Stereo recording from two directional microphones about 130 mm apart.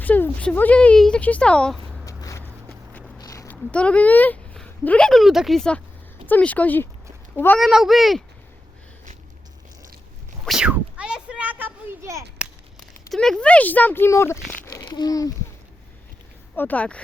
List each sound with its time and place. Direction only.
0.0 s speech: 10° left (ahead or behind)
2.0 s vehicle: 25° left (ahead or behind)
3.2 s a sound: 25° left (ahead or behind)
3.5 s a woman's voice: 10° left (ahead or behind)
7.6 s speech: centre (ahead or behind)
10.4 s a sound: 5° right (ahead or behind)
12.8 s speech: 5° left (ahead or behind); by 14.3 s 20° left (ahead or behind)
14.6 s a sound: 25° left (ahead or behind)
14.8 s speech: 35° left (ahead or behind)
16.6 s speech: 10° left (ahead or behind)